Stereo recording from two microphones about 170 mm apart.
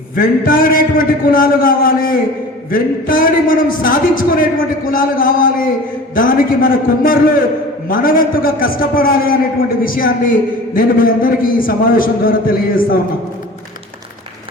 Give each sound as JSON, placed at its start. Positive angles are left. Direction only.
{"t": 0.2, "sound": "a man's voice", "side_deg": 55}